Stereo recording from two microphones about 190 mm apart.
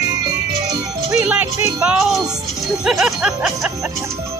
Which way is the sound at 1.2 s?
10° right (ahead or behind).